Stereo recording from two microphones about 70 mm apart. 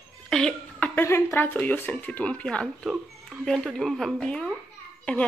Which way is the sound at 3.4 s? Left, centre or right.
Centre.